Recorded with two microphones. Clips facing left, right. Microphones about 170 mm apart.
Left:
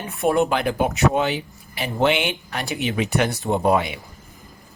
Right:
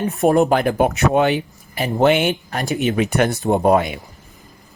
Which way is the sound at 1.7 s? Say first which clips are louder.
Right 5 dB; 45° right (ahead or behind).